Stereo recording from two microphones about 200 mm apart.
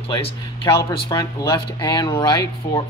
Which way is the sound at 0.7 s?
15° left (ahead or behind).